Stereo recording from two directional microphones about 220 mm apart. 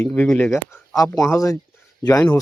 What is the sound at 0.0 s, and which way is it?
Speech, 5° left (ahead or behind).